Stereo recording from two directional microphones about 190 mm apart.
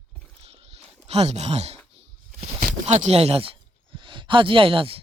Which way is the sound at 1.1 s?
35° right (ahead or behind).